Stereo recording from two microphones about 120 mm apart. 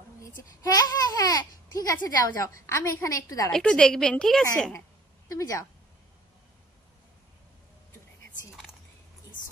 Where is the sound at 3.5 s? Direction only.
10° left (ahead or behind).